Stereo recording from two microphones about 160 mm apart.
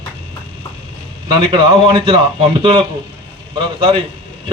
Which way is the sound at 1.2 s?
30° right (ahead or behind).